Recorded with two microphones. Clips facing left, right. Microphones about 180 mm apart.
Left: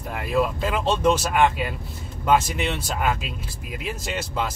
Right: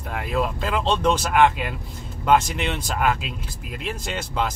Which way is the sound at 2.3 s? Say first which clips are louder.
Right 1 dB; 5° left (ahead or behind).